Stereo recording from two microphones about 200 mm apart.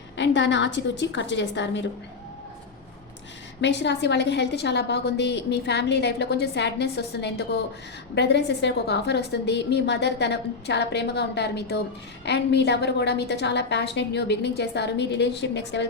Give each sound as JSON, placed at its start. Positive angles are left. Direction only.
{"t": 0.2, "sound": "a woman's voice", "side_deg": 65}
{"t": 3.6, "sound": "a woman's voice", "side_deg": 60}